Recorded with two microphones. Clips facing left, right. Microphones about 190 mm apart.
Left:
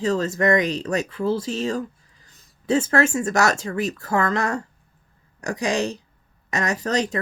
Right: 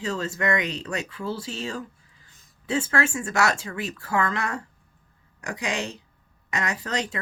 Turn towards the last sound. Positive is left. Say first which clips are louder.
# left 6 dB
turn(degrees=40)  # may be behind; listen again after turning